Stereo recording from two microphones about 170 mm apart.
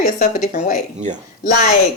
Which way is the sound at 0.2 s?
50° left (ahead or behind).